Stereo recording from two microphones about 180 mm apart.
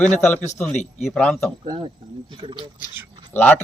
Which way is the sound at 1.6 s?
25° right (ahead or behind).